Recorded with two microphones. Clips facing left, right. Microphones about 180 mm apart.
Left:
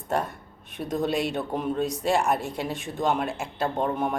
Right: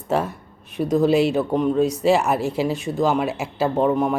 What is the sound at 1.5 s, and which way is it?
Speech, 70° right (ahead or behind).